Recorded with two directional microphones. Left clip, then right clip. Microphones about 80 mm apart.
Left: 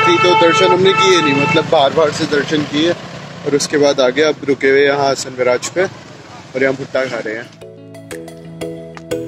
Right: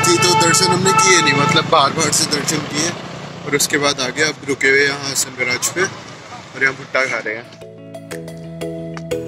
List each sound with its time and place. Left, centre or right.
0.0 s vehicle: left
0.5 s speech: left
1.2 s speech: left
2.0 s speech: left
3.5 s speech: centre
6.7 s speech: left
9.1 s music: centre